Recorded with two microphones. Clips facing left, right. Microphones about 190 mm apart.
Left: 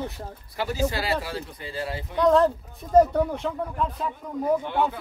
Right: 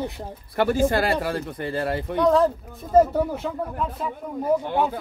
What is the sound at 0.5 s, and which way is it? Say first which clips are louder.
Speech: right 6 dB; 55° right (ahead or behind).